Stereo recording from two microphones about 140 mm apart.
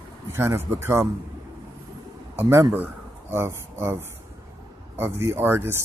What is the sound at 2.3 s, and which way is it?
Speech, 20° right (ahead or behind).